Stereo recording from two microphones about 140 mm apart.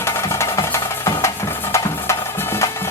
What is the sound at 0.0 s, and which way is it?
Music, 20° left (ahead or behind).